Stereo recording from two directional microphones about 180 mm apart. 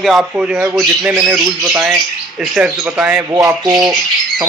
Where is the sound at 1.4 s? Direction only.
20° right (ahead or behind).